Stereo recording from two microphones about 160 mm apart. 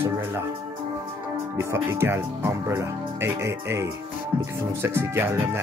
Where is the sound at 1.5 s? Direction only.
15° right (ahead or behind).